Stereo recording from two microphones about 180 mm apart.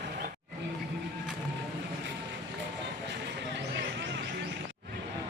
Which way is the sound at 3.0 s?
75° right (ahead or behind).